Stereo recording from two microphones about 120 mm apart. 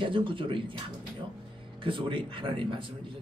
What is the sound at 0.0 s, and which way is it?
Speech, 45° right (ahead or behind).